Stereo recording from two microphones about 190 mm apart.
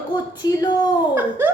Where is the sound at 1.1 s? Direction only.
10° right (ahead or behind).